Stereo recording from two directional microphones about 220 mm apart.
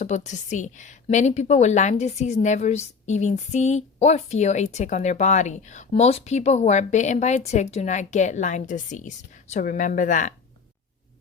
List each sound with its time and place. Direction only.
0.0 s a woman's voice: 35° left (ahead or behind)